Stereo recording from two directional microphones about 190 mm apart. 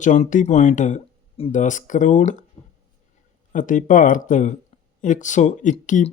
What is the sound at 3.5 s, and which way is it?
Speech, 45° left (ahead or behind).